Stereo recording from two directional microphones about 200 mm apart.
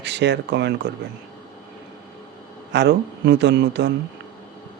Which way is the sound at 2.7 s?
60° right (ahead or behind).